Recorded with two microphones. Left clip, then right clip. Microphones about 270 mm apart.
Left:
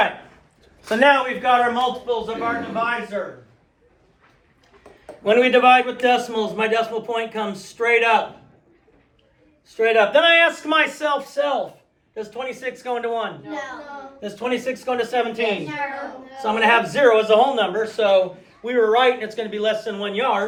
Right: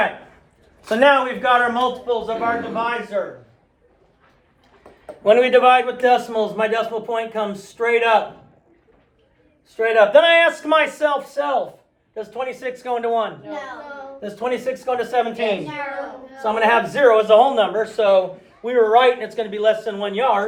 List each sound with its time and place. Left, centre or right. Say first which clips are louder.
0.9 s a man's voice: right 1 dB; centre
5.0 s a man's voice: right 2 dB; centre
9.7 s a man's voice: right 3 dB; centre